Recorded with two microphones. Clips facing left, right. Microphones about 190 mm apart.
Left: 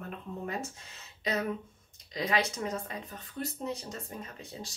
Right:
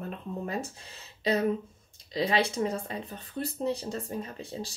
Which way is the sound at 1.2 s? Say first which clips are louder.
Right 6 dB; 30° right (ahead or behind).